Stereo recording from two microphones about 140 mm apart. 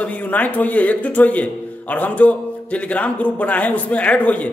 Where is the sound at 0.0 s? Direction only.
10° left (ahead or behind).